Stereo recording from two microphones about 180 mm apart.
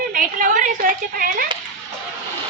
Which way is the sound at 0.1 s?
45° right (ahead or behind).